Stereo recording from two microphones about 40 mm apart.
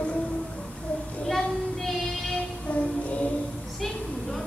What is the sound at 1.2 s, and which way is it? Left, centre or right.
Child singing, centre.